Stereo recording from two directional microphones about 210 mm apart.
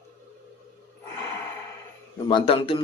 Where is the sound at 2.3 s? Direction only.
25° left (ahead or behind).